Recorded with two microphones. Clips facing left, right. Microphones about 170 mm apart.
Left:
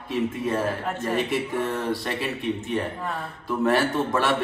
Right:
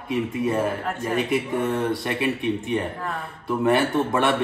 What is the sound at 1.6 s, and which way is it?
Speech, 20° right (ahead or behind).